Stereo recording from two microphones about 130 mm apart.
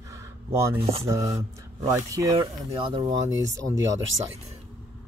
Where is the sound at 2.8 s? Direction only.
40° right (ahead or behind).